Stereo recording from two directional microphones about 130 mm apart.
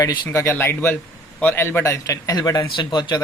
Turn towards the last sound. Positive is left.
turn(degrees=35)  # may be behind; listen again after turning